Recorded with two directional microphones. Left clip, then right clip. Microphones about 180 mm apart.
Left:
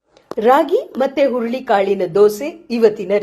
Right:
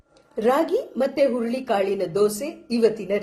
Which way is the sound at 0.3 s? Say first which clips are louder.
Left 8 dB; 15° left (ahead or behind).